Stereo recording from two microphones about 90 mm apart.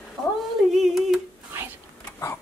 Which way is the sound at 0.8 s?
Centre (ahead or behind).